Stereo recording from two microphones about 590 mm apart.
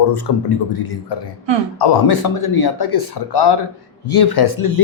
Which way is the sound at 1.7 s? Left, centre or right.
Left.